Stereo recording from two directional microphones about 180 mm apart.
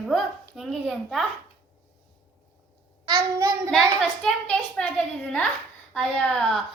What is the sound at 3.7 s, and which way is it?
A woman's voice, centre (ahead or behind).